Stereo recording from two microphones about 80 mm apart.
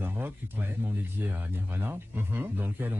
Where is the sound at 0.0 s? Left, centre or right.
Right.